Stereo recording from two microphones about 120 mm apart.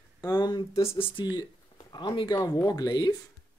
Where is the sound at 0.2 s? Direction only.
35° left (ahead or behind).